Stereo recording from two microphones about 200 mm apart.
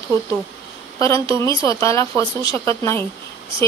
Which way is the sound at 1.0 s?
15° left (ahead or behind).